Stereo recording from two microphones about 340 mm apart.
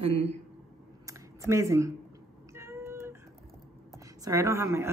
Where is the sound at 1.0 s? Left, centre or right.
Centre.